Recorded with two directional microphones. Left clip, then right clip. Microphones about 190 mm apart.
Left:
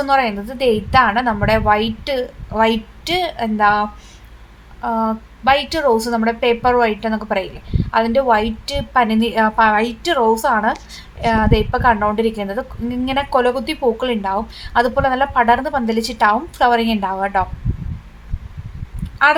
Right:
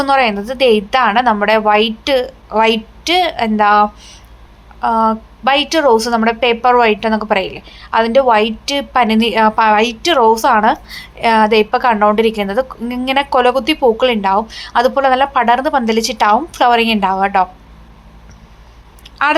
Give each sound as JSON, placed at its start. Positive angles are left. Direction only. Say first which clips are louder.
{"t": 0.0, "sound": "a woman's voice", "louder": "right 4 dB", "side_deg": -15}